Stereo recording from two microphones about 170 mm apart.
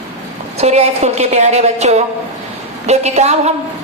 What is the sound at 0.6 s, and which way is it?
Speech, 40° right (ahead or behind).